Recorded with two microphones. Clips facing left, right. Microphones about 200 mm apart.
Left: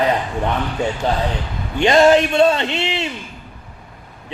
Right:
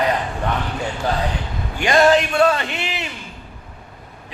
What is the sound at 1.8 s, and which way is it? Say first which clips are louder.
A man's voice: left 3 dB; 25° left (ahead or behind).